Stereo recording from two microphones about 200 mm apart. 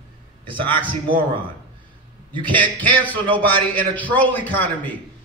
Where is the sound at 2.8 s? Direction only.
10° left (ahead or behind).